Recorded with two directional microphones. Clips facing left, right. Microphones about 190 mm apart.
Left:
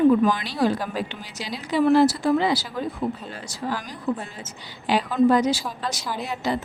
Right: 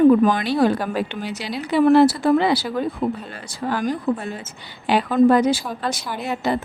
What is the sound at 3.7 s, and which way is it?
Speech, 55° right (ahead or behind).